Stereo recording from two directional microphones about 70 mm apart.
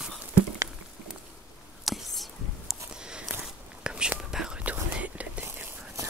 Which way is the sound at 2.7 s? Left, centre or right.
Centre.